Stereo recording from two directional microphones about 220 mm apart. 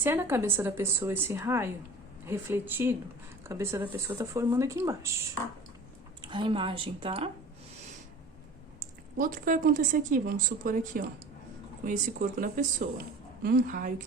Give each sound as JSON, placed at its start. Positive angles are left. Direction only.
{"t": 0.0, "sound": "a woman's voice", "side_deg": -10}
{"t": 6.2, "sound": "speech", "side_deg": -20}
{"t": 9.1, "sound": "a woman's voice", "side_deg": -40}